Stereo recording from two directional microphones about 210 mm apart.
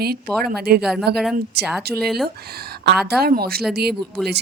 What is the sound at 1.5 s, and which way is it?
Speech, 50° right (ahead or behind).